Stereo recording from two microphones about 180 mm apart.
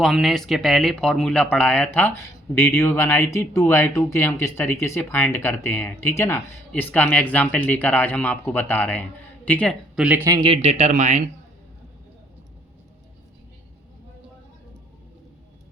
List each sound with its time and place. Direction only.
0.0 s speech: centre (ahead or behind)
10.2 s speech: 25° right (ahead or behind); by 11.2 s 40° right (ahead or behind)